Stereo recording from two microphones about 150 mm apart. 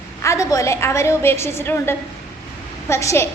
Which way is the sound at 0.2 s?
20° left (ahead or behind).